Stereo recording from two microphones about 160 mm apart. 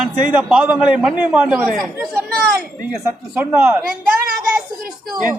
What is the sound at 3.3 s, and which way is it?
Speech, 10° right (ahead or behind).